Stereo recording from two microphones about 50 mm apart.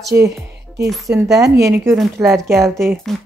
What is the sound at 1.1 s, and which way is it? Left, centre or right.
Speech, right.